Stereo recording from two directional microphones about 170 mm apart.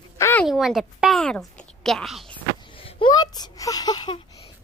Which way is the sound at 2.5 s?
30° left (ahead or behind).